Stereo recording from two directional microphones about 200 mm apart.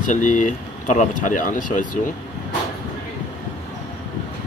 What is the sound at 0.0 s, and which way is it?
Speech, 40° left (ahead or behind).